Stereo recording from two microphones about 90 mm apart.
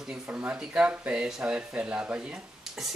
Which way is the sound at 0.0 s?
10° right (ahead or behind).